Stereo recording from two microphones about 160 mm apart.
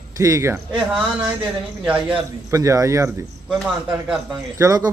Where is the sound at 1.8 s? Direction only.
5° right (ahead or behind).